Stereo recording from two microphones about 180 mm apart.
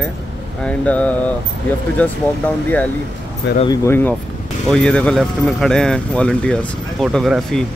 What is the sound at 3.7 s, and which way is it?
Speech, 15° left (ahead or behind).